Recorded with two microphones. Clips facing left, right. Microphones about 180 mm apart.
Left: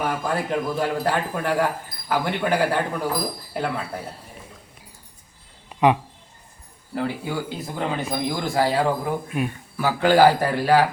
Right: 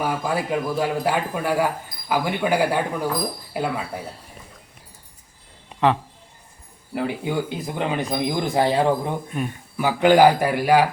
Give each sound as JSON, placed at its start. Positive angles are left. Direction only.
{"t": 0.0, "sound": "speech", "side_deg": -10}
{"t": 6.9, "sound": "speech", "side_deg": -15}